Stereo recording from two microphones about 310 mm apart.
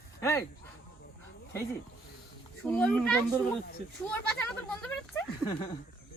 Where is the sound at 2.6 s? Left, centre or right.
Centre.